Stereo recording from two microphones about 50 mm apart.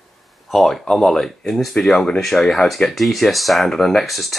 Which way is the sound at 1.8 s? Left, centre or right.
Left.